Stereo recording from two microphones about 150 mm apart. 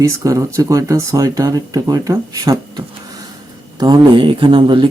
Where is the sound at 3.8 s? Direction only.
30° right (ahead or behind).